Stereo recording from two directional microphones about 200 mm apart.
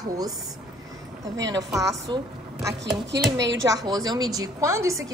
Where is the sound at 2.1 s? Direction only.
20° right (ahead or behind).